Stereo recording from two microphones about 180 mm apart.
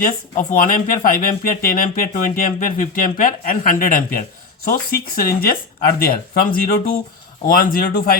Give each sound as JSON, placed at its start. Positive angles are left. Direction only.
{"t": 0.0, "sound": "speech", "side_deg": 50}